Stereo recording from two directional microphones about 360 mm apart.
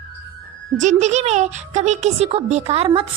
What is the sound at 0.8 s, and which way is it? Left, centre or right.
A woman's voice, centre.